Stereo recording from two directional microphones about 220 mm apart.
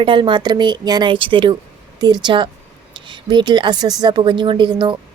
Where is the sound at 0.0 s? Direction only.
20° right (ahead or behind).